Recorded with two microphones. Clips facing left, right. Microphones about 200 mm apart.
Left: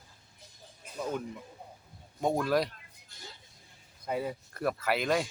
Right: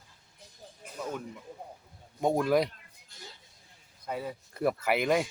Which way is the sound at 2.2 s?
15° right (ahead or behind).